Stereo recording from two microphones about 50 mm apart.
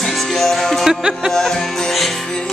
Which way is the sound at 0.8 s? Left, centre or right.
Centre.